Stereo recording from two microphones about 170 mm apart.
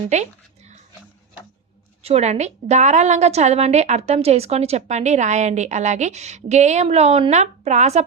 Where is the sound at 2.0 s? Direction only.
40° right (ahead or behind).